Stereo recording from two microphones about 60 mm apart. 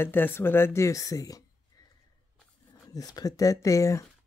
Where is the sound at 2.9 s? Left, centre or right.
Left.